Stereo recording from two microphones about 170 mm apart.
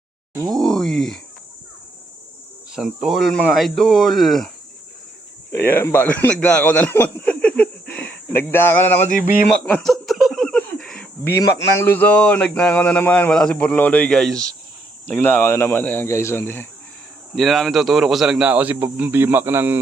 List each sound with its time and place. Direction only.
0.3 s speech: 20° right (ahead or behind)
0.6 s speech: 5° left (ahead or behind)
2.7 s speech: 5° right (ahead or behind)
5.5 s speech: 15° left (ahead or behind)
9.6 s a sound: 5° left (ahead or behind)
11.8 s speech: 10° left (ahead or behind)
17.3 s speech: centre (ahead or behind)